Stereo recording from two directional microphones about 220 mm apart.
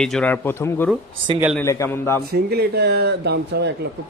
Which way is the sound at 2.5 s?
45° right (ahead or behind).